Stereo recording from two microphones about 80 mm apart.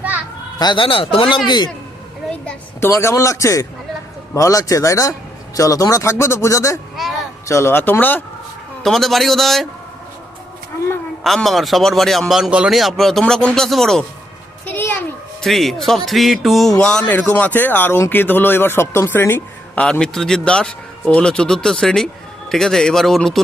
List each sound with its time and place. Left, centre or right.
0.6 s speech: left
1.5 s a man's voice: left
2.8 s speech: left
6.9 s a sound: centre
7.4 s a man's voice: left
8.8 s a man's voice: centre
11.2 s a man's voice: centre
12.7 s a man's voice: centre
14.7 s a sound: left
15.4 s a man's voice: centre
16.7 s a man's voice: centre
19.8 s a man's voice: centre